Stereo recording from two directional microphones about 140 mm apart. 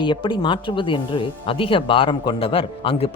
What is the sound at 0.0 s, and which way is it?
A man's voice, 35° left (ahead or behind).